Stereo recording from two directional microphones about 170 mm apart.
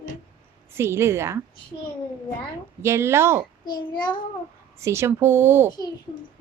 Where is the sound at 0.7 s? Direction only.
15° right (ahead or behind).